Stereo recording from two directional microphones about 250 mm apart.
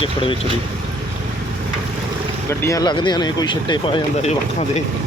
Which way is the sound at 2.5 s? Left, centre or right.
Centre.